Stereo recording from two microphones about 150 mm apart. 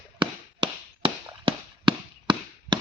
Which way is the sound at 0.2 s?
35° right (ahead or behind).